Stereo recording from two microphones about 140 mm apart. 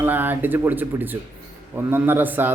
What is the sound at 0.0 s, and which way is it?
Speech, 15° right (ahead or behind).